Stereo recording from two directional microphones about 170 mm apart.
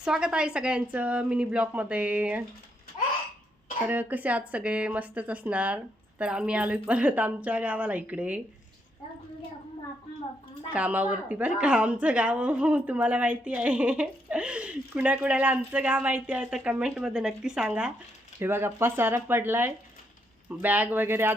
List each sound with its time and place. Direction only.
0.0 s a woman's voice: 5° right (ahead or behind)
3.8 s a woman's voice: 10° right (ahead or behind)
10.7 s a woman's voice: 10° right (ahead or behind)